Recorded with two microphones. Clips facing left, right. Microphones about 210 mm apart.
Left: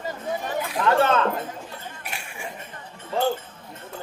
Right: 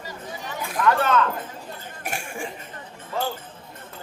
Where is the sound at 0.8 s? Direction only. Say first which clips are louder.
Even; 25° left (ahead or behind).